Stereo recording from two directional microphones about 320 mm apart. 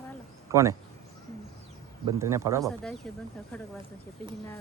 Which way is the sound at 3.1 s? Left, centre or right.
Centre.